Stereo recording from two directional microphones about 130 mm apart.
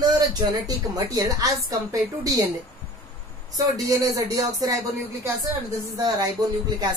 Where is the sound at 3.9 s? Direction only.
25° right (ahead or behind).